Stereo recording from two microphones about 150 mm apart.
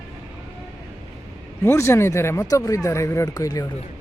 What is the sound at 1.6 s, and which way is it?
Speech, 15° left (ahead or behind).